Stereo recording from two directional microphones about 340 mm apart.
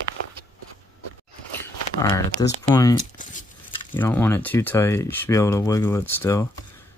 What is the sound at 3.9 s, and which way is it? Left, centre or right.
Speech, centre.